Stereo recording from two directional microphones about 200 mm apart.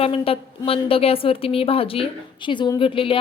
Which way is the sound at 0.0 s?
30° left (ahead or behind).